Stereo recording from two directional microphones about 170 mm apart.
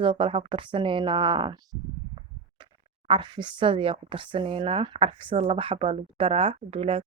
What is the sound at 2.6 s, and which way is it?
Speech, 30° right (ahead or behind).